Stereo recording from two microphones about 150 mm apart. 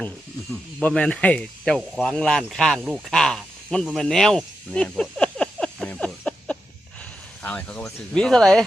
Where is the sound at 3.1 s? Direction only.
5° left (ahead or behind).